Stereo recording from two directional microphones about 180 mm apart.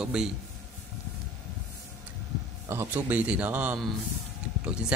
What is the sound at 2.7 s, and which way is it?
A man's voice, 10° right (ahead or behind).